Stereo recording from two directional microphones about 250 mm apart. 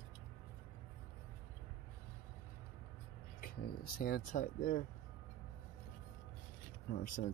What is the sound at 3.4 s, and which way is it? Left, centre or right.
Speech, left.